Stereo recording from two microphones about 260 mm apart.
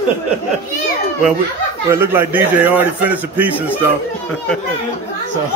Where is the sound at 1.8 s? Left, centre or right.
Centre.